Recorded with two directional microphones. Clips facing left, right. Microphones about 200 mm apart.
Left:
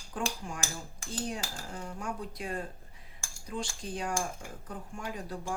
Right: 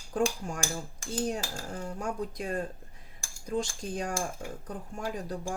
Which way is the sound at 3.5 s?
40° right (ahead or behind).